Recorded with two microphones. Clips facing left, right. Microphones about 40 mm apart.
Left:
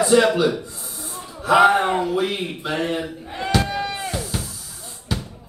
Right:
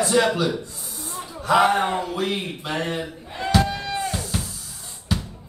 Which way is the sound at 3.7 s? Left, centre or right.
Centre.